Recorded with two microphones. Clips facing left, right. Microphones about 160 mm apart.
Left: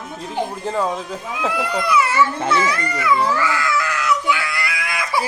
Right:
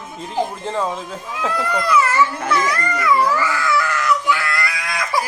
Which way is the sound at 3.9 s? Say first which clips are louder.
Right 1 dB; 10° left (ahead or behind).